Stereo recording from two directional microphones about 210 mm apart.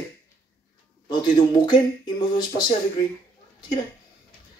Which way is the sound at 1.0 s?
20° left (ahead or behind).